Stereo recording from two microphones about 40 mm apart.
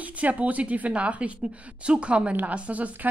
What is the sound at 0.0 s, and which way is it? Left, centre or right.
A woman's voice, right.